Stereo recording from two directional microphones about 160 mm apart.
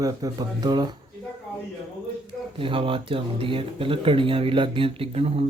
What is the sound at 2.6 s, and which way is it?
Speech, 35° right (ahead or behind).